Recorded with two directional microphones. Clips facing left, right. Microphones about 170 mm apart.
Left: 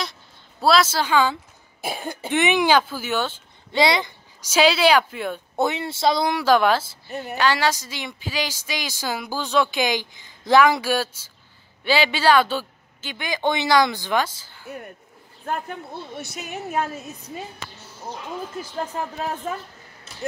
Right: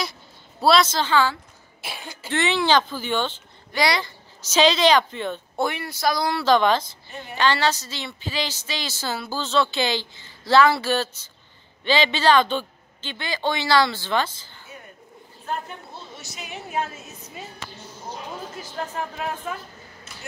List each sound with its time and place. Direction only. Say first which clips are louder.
0.6 s a woman's voice: even; centre (ahead or behind)
1.9 s a woman's voice: left 8 dB; 50° left (ahead or behind)
2.2 s a woman's voice: left 2 dB; 15° left (ahead or behind)
3.7 s a woman's voice: left 3 dB; 20° left (ahead or behind)
5.6 s speech: left 3 dB; 20° left (ahead or behind)
6.4 s a woman's voice: even; 10° left (ahead or behind)
15.5 s a woman's voice: left 3 dB; 55° left (ahead or behind)